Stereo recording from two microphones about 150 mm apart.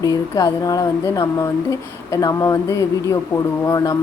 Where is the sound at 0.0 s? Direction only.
25° left (ahead or behind).